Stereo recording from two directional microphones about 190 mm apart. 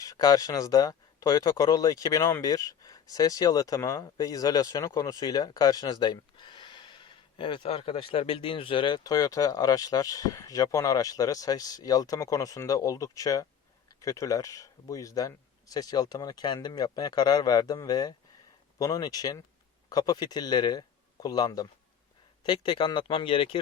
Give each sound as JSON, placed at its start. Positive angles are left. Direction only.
{"t": 0.0, "sound": "speech", "side_deg": 20}